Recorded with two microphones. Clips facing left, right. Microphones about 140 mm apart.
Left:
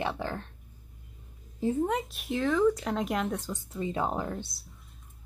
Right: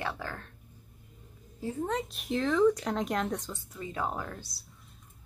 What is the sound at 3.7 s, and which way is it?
Speech, 25° left (ahead or behind).